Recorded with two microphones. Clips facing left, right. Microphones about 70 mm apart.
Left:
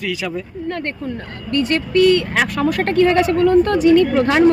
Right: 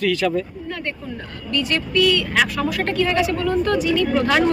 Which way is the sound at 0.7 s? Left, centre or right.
Left.